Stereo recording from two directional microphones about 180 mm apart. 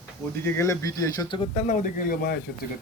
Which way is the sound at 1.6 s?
50° left (ahead or behind).